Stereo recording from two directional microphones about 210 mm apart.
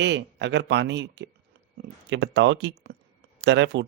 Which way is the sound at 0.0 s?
55° right (ahead or behind).